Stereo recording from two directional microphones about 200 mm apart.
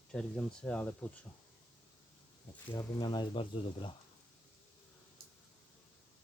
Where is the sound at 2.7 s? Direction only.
20° left (ahead or behind).